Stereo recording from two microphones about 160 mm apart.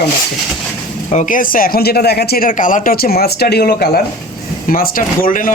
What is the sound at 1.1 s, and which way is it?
Speech, 55° left (ahead or behind).